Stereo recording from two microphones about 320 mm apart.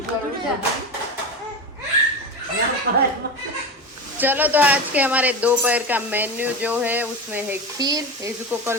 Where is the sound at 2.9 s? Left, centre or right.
Right.